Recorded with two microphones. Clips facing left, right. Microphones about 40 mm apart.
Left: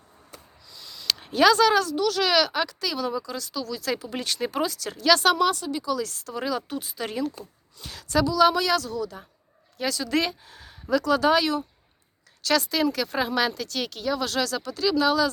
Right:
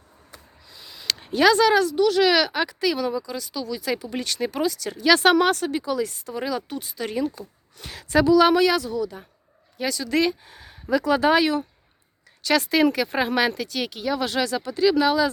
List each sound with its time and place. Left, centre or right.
0.7 s a sound: right
1.0 s speech: centre
5.2 s speech: right
5.8 s a woman's voice: right
6.1 s speech: centre
7.9 s a woman's voice: right